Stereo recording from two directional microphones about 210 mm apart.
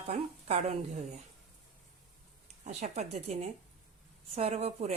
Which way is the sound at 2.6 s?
30° right (ahead or behind).